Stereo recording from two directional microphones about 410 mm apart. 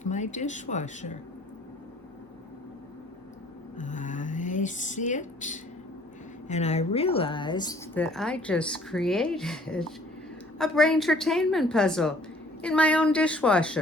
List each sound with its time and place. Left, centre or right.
0.0 s speech: centre
3.8 s speech: centre